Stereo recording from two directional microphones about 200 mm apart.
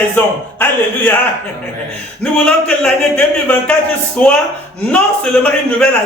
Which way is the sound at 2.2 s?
5° left (ahead or behind).